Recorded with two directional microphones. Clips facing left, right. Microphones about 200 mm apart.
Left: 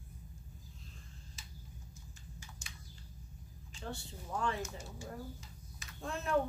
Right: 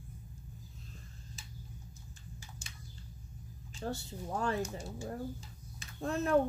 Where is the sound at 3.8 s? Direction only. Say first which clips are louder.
Right 6 dB; 40° right (ahead or behind).